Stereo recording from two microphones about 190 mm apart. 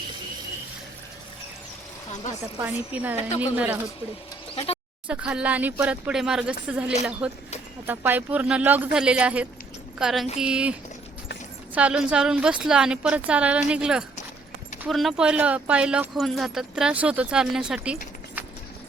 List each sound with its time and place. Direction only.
2.6 s speech: 10° right (ahead or behind)
3.2 s speech: 30° left (ahead or behind)
3.5 s speech: 10° right (ahead or behind)
4.5 s speech: 30° left (ahead or behind)
5.0 s speech: 5° right (ahead or behind)